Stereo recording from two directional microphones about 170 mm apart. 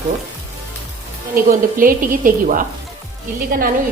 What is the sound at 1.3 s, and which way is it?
A woman's voice, 55° right (ahead or behind).